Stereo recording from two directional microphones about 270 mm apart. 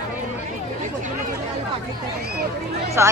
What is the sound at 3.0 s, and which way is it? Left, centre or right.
Speech, centre.